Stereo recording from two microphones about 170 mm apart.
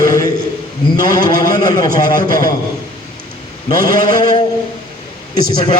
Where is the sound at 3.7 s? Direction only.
25° left (ahead or behind).